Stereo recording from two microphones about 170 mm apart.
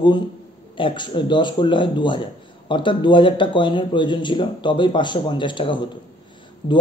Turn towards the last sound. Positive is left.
turn(degrees=35)  # may be behind; listen again after turning